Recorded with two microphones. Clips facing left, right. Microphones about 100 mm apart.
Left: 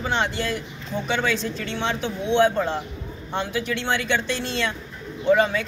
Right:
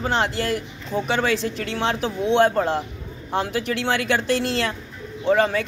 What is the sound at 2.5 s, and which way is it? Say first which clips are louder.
Speech: right 2 dB; 40° right (ahead or behind).